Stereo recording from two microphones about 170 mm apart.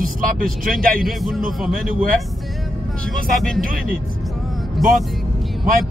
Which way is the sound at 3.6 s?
55° right (ahead or behind).